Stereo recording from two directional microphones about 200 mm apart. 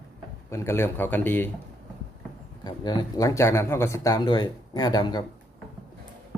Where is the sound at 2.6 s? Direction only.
20° left (ahead or behind).